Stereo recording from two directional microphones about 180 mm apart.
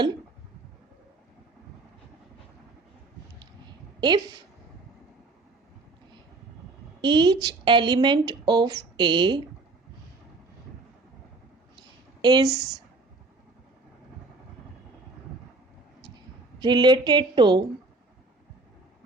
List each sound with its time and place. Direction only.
4.0 s speech: 25° right (ahead or behind)
7.0 s speech: 25° right (ahead or behind)
12.2 s speech: 25° right (ahead or behind)
16.6 s speech: 25° right (ahead or behind)